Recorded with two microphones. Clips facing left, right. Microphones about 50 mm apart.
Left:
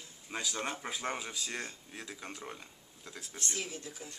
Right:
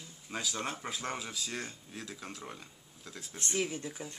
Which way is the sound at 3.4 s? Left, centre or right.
Right.